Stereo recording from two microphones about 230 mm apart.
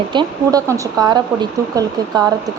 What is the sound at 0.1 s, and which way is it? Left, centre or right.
Speech, centre.